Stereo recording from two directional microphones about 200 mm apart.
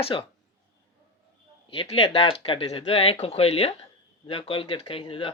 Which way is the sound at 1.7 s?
30° left (ahead or behind).